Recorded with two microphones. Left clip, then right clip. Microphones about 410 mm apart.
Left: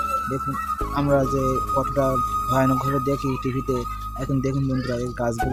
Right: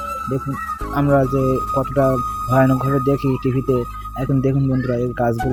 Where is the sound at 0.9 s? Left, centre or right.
Left.